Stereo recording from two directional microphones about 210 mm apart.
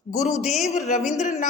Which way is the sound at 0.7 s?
35° left (ahead or behind).